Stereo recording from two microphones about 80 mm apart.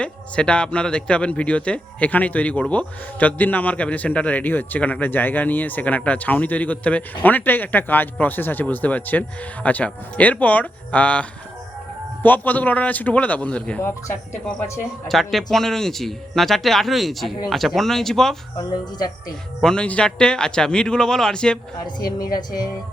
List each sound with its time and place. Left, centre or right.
0.0 s a man's voice: centre
15.0 s speech: centre
19.6 s a man's voice: centre
21.8 s speech: left